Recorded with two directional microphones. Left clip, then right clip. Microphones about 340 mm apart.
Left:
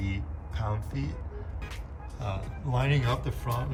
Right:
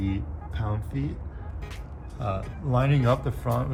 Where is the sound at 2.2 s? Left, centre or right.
Centre.